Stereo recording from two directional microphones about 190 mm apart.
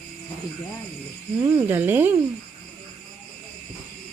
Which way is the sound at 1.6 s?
10° right (ahead or behind).